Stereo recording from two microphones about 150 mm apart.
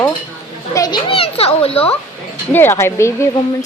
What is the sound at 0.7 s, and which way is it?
Children playing, 25° left (ahead or behind).